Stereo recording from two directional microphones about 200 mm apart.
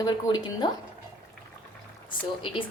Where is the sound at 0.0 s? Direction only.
20° left (ahead or behind).